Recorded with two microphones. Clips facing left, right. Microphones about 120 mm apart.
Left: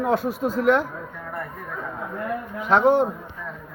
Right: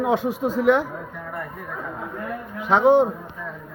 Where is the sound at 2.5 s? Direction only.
15° right (ahead or behind).